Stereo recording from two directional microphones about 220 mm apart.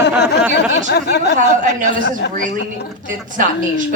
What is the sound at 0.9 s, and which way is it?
Speech, 50° left (ahead or behind).